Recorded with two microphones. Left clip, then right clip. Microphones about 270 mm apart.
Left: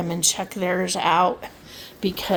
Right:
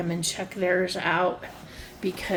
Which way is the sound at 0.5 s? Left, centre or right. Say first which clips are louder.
Left 1 dB; left.